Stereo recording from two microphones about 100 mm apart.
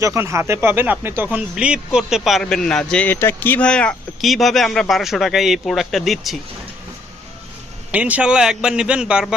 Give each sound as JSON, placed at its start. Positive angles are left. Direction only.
{"t": 0.0, "sound": "speech", "side_deg": -30}
{"t": 3.2, "sound": "speech", "side_deg": 20}
{"t": 3.7, "sound": "speech", "side_deg": 10}
{"t": 4.2, "sound": "speech", "side_deg": 0}
{"t": 7.9, "sound": "speech", "side_deg": -15}